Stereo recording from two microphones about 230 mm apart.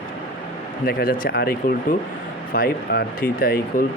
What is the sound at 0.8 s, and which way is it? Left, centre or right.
Speech, left.